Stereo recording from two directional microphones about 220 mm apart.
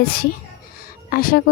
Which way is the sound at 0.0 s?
45° left (ahead or behind).